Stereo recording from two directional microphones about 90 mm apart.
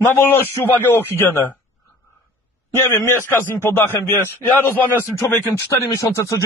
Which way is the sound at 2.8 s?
25° left (ahead or behind).